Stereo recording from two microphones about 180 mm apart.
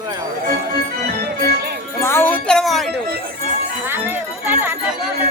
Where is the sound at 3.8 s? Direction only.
10° right (ahead or behind).